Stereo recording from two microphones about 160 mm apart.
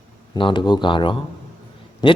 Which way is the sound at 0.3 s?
30° left (ahead or behind).